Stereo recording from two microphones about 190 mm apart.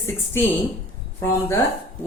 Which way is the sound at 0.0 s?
15° left (ahead or behind).